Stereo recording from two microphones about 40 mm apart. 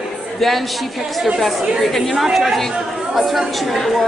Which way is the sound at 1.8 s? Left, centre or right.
Centre.